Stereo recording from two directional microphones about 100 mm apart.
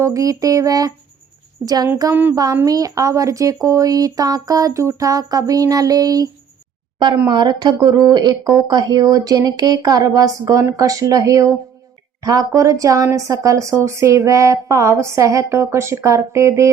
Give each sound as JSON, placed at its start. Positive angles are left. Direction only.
{"t": 0.0, "sound": "speech", "side_deg": -35}